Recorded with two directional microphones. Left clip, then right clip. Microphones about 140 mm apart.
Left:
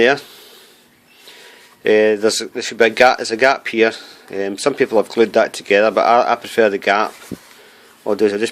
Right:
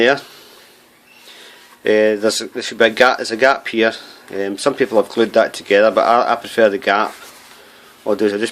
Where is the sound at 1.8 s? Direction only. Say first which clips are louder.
Left 1 dB; 45° left (ahead or behind).